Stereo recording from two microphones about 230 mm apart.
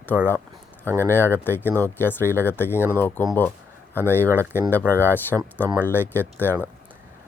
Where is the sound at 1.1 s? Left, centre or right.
Centre.